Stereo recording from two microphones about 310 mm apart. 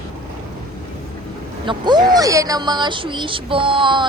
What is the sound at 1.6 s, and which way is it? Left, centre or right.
Speech, centre.